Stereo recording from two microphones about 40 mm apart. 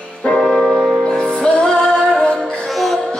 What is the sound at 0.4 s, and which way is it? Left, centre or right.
Music, centre.